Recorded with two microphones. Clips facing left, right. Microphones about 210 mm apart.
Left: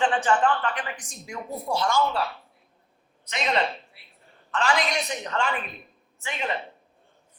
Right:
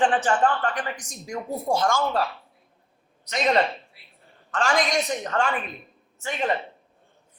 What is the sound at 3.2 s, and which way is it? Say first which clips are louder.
A woman's voice: right 4 dB; 45° right (ahead or behind).